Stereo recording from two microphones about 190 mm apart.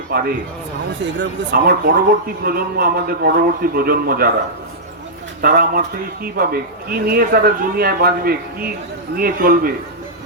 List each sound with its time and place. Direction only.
0.1 s a man's voice: 55° right (ahead or behind)
5.4 s a man's voice: 50° right (ahead or behind)